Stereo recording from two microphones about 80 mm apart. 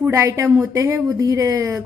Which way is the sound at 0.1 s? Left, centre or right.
Right.